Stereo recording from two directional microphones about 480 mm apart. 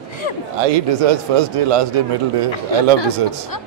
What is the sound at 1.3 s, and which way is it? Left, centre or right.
Speech, right.